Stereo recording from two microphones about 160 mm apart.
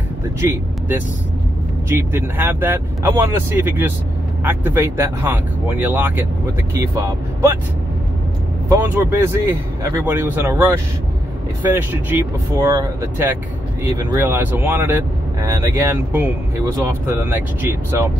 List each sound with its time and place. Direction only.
0.4 s speech: 15° right (ahead or behind)
8.6 s speech: 15° right (ahead or behind)